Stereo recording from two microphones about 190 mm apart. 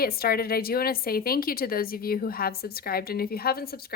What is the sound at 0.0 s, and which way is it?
Speech, 50° left (ahead or behind).